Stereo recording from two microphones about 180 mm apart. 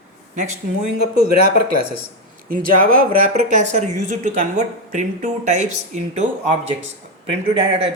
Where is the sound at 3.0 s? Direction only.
35° right (ahead or behind).